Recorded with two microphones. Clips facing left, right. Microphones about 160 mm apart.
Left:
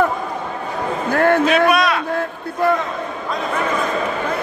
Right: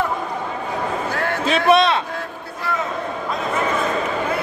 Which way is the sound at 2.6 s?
55° left (ahead or behind).